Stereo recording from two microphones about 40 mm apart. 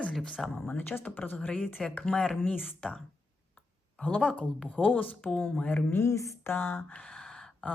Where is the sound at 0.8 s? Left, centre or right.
Left.